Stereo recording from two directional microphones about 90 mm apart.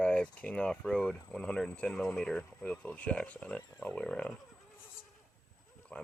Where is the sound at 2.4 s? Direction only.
20° left (ahead or behind).